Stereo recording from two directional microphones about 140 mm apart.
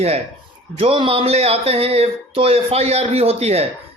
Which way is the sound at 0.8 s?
40° right (ahead or behind).